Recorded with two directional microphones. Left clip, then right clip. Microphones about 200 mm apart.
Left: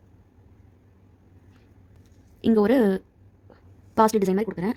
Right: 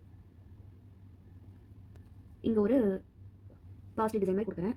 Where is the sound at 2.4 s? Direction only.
55° left (ahead or behind).